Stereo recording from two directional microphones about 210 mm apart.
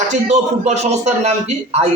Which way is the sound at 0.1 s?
30° right (ahead or behind).